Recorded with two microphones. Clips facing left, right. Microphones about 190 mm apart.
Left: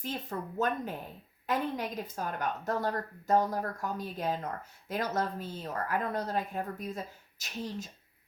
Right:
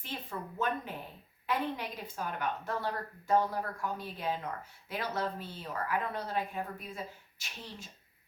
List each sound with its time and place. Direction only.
0.0 s a woman's voice: 40° left (ahead or behind)